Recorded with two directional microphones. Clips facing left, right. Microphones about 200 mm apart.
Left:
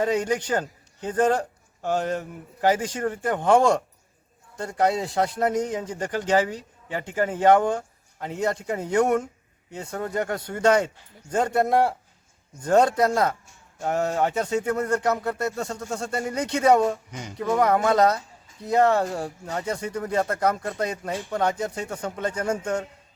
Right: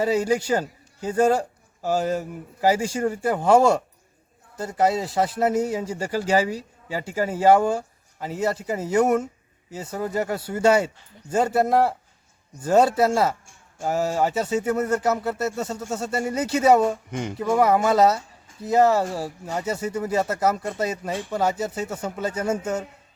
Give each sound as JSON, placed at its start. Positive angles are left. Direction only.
{"t": 0.0, "sound": "a man's voice", "side_deg": -5}
{"t": 17.1, "sound": "speech", "side_deg": -55}
{"t": 17.3, "sound": "speech", "side_deg": -5}